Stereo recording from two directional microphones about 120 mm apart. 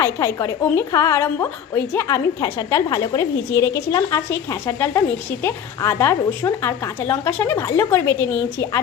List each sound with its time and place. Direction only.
0.0 s a woman's voice: 25° left (ahead or behind)